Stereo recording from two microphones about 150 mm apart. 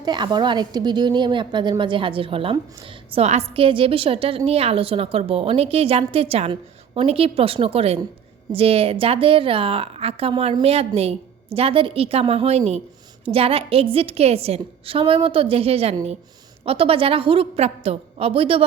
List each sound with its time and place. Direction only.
0.0 s a woman's voice: 30° right (ahead or behind)